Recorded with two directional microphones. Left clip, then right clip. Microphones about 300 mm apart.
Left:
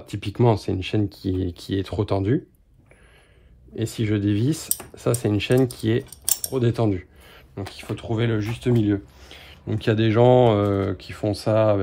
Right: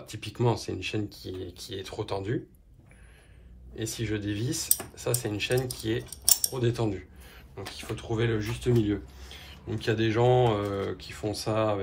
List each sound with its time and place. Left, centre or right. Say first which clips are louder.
0.0 s speech: left 8 dB; left
3.7 s speech: left 7 dB; left